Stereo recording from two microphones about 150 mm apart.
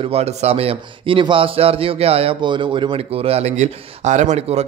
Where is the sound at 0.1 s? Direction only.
45° right (ahead or behind).